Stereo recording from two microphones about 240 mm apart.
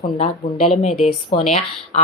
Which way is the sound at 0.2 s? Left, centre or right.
Left.